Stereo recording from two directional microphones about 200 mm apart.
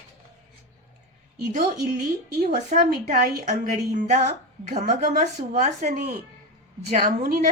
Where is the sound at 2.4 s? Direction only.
40° right (ahead or behind).